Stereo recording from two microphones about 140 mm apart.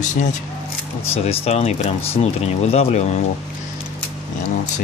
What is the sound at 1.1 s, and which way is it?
Speech, 45° left (ahead or behind).